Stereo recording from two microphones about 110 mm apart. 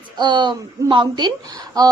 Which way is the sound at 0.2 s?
45° right (ahead or behind).